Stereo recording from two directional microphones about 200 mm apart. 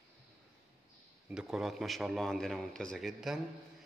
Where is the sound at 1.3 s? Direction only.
5° right (ahead or behind).